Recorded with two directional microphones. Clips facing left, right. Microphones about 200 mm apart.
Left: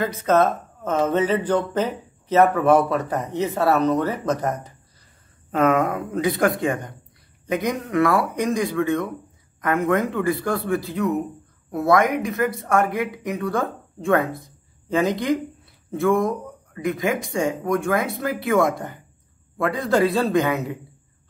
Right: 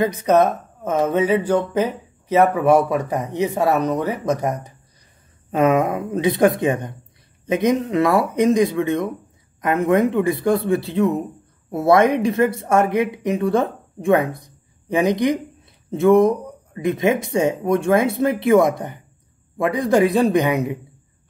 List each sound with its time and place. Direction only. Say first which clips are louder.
0.0 s speech: right 3 dB; 15° right (ahead or behind)